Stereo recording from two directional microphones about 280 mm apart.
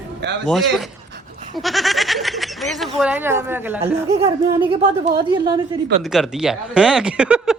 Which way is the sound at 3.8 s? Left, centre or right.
Right.